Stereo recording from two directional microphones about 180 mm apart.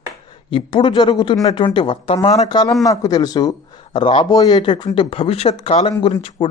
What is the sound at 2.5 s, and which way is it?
Speech, 25° left (ahead or behind).